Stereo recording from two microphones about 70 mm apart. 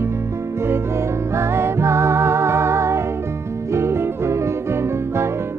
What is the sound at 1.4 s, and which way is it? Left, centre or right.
Music, right.